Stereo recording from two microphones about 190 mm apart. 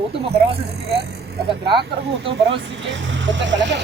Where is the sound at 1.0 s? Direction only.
60° right (ahead or behind).